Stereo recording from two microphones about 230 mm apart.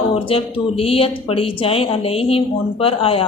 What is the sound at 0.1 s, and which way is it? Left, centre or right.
Speech, left.